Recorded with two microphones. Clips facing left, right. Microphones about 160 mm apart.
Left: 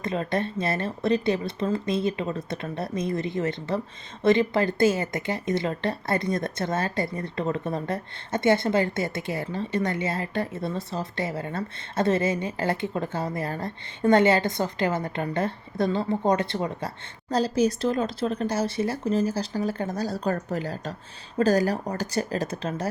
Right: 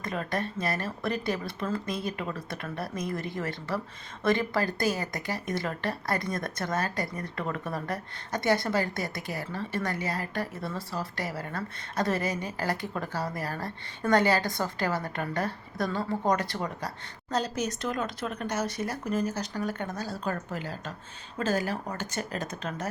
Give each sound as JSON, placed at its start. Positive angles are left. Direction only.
{"t": 0.0, "sound": "a woman's voice", "side_deg": 25}